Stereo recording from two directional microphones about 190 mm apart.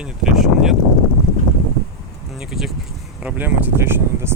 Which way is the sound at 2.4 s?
Centre (ahead or behind).